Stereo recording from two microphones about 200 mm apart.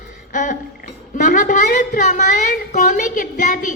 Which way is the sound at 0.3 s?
40° left (ahead or behind).